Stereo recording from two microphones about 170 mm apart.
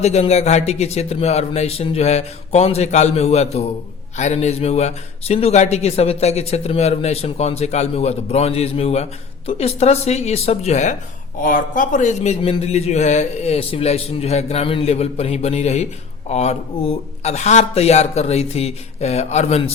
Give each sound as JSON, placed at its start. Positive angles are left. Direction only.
{"t": 0.0, "sound": "a man's voice", "side_deg": 40}
{"t": 11.3, "sound": "a man's voice", "side_deg": 55}